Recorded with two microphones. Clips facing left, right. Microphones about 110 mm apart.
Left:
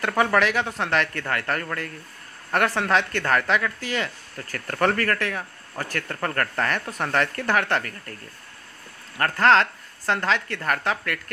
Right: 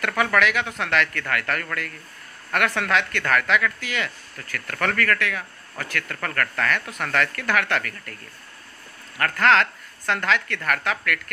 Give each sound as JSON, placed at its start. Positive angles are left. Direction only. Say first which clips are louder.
{"t": 0.0, "sound": "a man's voice", "louder": "left 1 dB", "side_deg": 30}
{"t": 9.2, "sound": "speech", "louder": "left 1 dB", "side_deg": 30}